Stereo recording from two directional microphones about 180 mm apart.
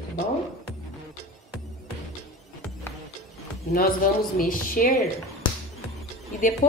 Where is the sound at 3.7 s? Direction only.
55° left (ahead or behind).